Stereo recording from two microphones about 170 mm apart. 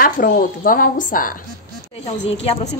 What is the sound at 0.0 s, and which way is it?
A woman's voice, 60° left (ahead or behind).